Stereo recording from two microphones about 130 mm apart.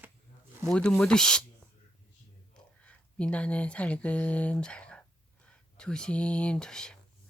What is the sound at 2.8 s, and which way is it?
Speech, 10° left (ahead or behind).